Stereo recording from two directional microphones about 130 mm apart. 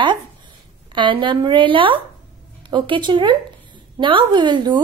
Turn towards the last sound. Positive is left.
turn(degrees=-35)  # may be behind; listen again after turning